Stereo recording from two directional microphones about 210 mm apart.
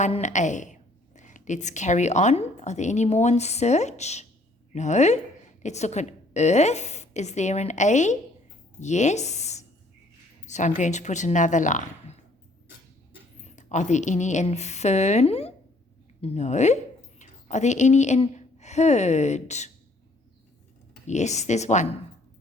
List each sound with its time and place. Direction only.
0.0 s a woman's voice: 35° left (ahead or behind)
13.4 s a woman's voice: 35° left (ahead or behind)
21.1 s a woman's voice: 35° left (ahead or behind)